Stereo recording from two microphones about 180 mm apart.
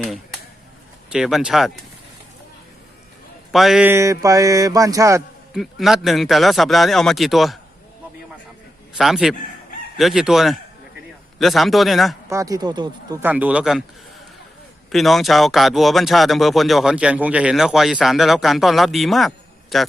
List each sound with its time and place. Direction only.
1.1 s speech: 5° right (ahead or behind)
3.5 s speech: centre (ahead or behind); by 5.2 s 15° right (ahead or behind)
5.5 s speech: centre (ahead or behind)
9.0 s speech: centre (ahead or behind)
12.3 s speech: 20° right (ahead or behind)
13.2 s speech: 10° right (ahead or behind)
14.9 s speech: centre (ahead or behind)